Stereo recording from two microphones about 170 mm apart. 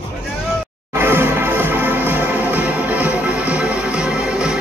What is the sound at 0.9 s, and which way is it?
Music, 15° right (ahead or behind).